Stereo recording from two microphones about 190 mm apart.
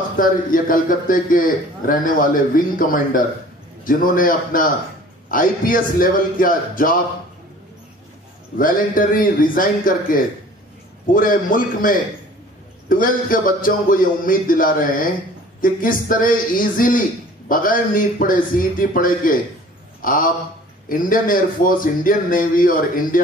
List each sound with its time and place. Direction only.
0.2 s a man's voice: 45° left (ahead or behind)
8.5 s a man's voice: 45° left (ahead or behind)